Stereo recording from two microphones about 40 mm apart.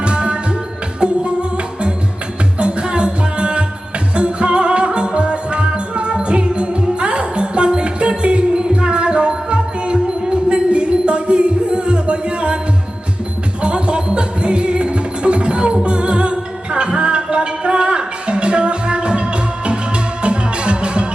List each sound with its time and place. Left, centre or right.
0.0 s music: right
13.6 s music: right